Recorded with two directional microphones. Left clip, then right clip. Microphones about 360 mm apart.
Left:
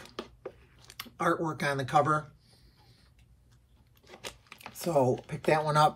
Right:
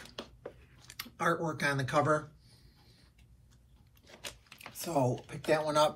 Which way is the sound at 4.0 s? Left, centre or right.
Centre.